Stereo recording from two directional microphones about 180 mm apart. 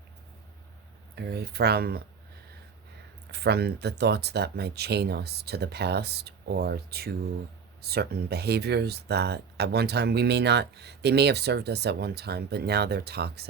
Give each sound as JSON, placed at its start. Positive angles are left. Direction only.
{"t": 1.1, "sound": "speech", "side_deg": -65}
{"t": 3.3, "sound": "speech", "side_deg": -65}